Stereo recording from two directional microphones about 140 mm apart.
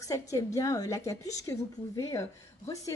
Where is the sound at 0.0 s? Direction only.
25° left (ahead or behind).